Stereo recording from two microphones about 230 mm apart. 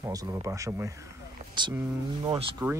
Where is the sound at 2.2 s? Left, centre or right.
Centre.